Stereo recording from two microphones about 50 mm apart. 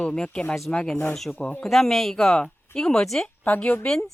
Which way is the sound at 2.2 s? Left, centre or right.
Centre.